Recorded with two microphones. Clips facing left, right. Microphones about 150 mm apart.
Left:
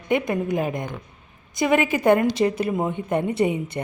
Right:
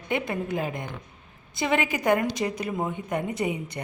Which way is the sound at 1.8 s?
15° right (ahead or behind).